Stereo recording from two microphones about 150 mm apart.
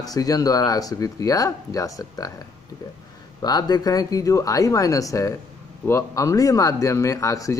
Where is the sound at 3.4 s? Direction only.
25° left (ahead or behind).